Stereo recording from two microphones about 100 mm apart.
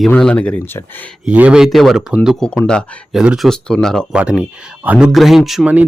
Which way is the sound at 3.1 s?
5° right (ahead or behind).